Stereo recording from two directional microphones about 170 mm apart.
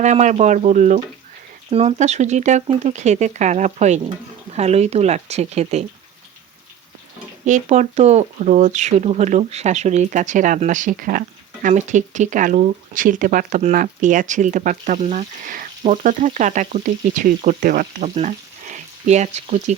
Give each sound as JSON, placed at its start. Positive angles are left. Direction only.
{"t": 0.0, "sound": "frying", "side_deg": -45}
{"t": 4.5, "sound": "speech", "side_deg": -40}
{"t": 7.4, "sound": "frying", "side_deg": -45}